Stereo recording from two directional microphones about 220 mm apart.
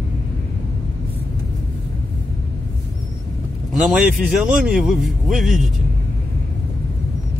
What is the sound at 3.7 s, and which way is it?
Speech, centre (ahead or behind).